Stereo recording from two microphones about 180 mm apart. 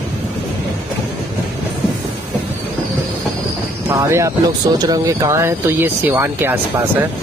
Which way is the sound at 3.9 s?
15° right (ahead or behind).